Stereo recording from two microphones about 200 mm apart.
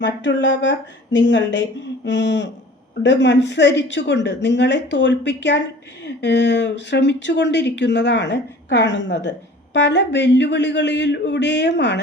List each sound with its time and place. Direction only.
0.0 s speech: 65° left (ahead or behind)